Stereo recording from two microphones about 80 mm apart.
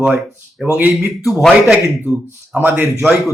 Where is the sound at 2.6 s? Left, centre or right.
Right.